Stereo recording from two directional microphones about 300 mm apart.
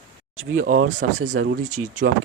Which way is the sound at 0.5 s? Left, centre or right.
Right.